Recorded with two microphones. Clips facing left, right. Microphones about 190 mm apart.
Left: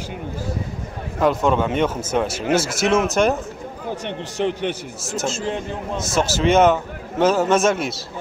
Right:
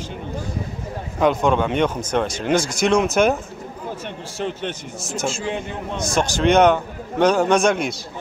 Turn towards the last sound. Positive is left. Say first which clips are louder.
# even
turn(degrees=0)  # may be behind; listen again after turning